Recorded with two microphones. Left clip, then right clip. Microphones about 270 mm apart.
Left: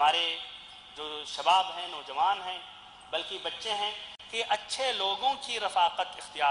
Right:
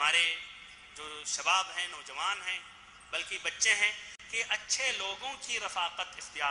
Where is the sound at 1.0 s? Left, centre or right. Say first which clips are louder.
Left 2 dB; centre.